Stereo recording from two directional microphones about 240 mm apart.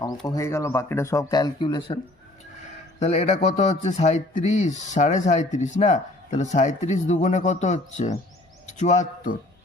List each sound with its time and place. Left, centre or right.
0.3 s a man's voice: centre
3.0 s speech: left